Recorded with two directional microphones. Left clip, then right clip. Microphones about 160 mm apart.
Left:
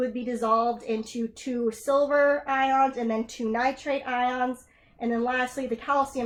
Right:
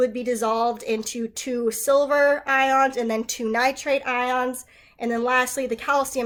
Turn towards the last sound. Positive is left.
turn(degrees=-30)  # may be behind; listen again after turning